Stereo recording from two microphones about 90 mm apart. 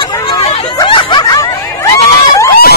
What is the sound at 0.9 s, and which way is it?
Snicker, 60° left (ahead or behind).